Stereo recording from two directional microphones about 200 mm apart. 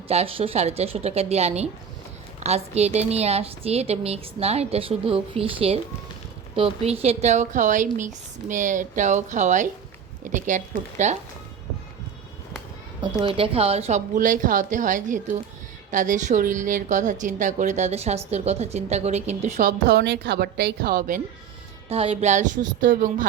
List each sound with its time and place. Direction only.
0.1 s a woman's voice: 30° right (ahead or behind)
13.0 s a woman's voice: 25° right (ahead or behind)
19.9 s a woman's voice: 60° right (ahead or behind)
21.8 s a woman's voice: 30° right (ahead or behind)